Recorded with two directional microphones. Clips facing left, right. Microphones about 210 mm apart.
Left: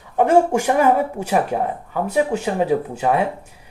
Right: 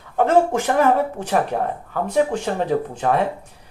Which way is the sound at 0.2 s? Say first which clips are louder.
Left 2 dB; 10° left (ahead or behind).